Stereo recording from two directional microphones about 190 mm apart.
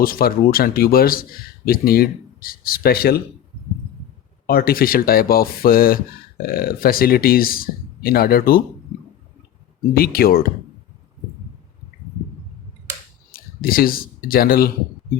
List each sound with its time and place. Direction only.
0.0 s speech: 50° left (ahead or behind)
4.4 s speech: 50° left (ahead or behind)
9.9 s speech: 50° left (ahead or behind)
13.3 s speech: 50° left (ahead or behind)